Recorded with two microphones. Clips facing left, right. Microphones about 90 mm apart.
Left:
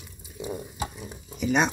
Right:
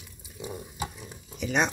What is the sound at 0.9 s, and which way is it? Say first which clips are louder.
Stir: left 4 dB; 10° left (ahead or behind).